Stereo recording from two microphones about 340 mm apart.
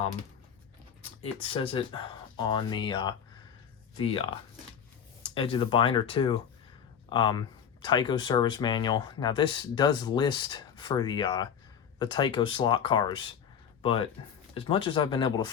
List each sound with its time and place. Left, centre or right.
1.0 s speech: centre
14.5 s speech: centre